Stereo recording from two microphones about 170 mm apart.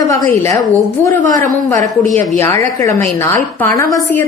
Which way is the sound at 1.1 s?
50° right (ahead or behind).